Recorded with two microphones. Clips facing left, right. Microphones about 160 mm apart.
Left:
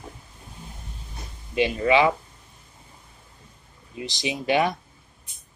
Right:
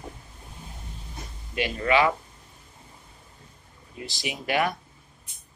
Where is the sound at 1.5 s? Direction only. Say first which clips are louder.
Left 3 dB; 20° left (ahead or behind).